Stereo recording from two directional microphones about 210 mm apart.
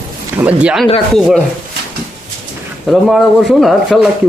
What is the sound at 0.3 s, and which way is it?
Speech, 5° right (ahead or behind).